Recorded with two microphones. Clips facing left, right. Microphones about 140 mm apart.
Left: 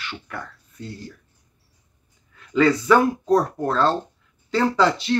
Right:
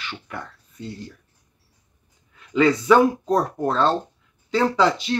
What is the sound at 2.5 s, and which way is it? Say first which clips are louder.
Speech: right 1 dB; 15° right (ahead or behind).